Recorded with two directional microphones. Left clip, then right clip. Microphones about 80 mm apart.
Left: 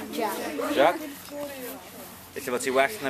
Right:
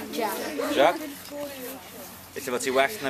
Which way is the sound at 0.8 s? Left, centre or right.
Centre.